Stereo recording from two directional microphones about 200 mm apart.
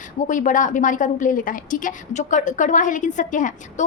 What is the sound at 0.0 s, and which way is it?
A woman's voice, 40° left (ahead or behind).